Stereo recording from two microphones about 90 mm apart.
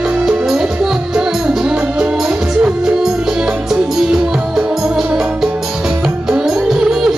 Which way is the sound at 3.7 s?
5° right (ahead or behind).